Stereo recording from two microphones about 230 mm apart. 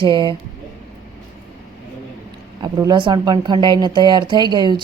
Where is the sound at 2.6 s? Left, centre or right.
Centre.